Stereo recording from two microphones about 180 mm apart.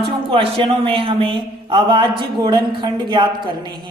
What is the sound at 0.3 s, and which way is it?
Speech, 30° right (ahead or behind).